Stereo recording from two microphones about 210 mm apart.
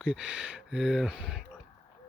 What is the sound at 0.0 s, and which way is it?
Speech, 5° right (ahead or behind).